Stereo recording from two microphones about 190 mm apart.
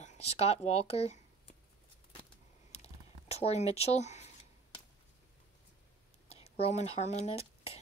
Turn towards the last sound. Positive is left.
turn(degrees=30)  # may be behind; listen again after turning